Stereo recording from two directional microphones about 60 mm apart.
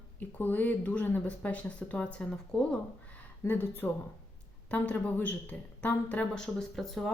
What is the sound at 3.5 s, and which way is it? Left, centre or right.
Speech, left.